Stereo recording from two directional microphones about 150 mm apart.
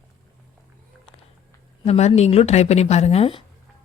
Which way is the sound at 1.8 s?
45° left (ahead or behind).